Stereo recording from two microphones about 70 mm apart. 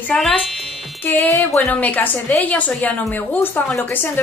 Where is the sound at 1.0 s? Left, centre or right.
Left.